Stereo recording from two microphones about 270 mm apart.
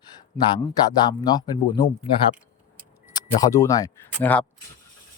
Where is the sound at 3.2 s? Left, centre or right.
Centre.